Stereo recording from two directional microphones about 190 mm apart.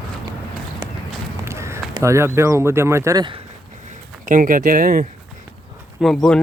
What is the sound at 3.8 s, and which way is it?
Speech, 40° right (ahead or behind).